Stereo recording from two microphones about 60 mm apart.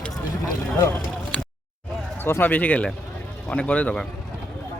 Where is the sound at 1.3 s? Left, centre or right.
Centre.